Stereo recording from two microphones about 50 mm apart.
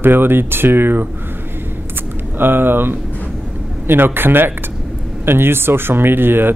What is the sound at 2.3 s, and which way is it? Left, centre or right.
A man's voice, right.